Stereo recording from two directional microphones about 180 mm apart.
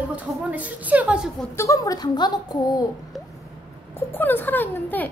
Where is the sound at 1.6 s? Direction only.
20° left (ahead or behind).